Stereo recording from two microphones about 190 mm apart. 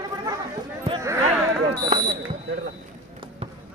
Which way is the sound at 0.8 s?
20° right (ahead or behind).